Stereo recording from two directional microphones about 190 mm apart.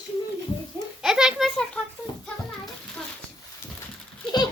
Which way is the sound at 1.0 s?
5° right (ahead or behind).